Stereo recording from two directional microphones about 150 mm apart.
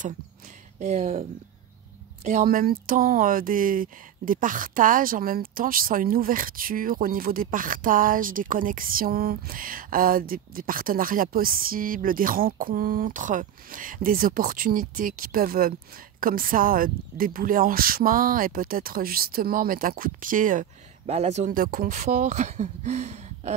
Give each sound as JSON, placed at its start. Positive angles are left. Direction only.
{"t": 0.7, "sound": "speech", "side_deg": -50}
{"t": 2.4, "sound": "speech", "side_deg": -80}
{"t": 21.1, "sound": "speech", "side_deg": -45}
{"t": 21.5, "sound": "speech", "side_deg": -70}